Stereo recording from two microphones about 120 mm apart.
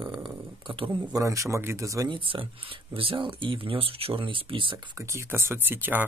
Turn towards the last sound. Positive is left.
turn(degrees=-15)  # may be behind; listen again after turning